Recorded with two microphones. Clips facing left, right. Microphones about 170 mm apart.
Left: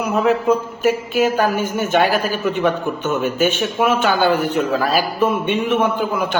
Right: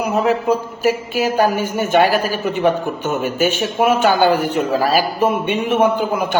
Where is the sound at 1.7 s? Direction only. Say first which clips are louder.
Right 3 dB; 45° right (ahead or behind).